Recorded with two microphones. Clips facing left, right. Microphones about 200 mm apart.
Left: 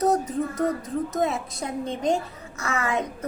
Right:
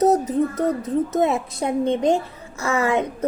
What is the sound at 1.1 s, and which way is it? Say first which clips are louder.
A woman's voice: right 5 dB; 25° right (ahead or behind).